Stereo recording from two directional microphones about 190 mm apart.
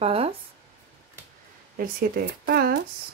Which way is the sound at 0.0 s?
30° right (ahead or behind).